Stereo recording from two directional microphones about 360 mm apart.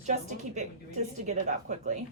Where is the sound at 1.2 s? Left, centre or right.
Centre.